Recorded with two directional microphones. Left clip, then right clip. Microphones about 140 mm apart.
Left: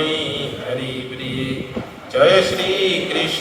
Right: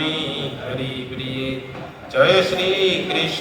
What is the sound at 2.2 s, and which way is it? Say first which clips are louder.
Mantra: left 2 dB; 45° right (ahead or behind).